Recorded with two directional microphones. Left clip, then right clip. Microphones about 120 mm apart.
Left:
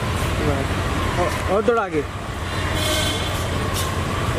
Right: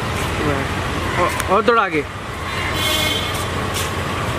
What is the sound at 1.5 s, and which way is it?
Speech, 40° right (ahead or behind).